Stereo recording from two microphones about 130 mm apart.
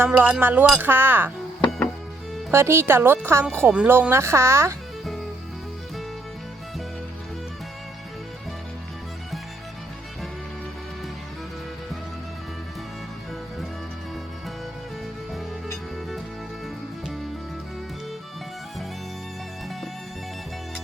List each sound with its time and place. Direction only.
0.0 s speech: 15° right (ahead or behind)
2.5 s speech: 20° right (ahead or behind)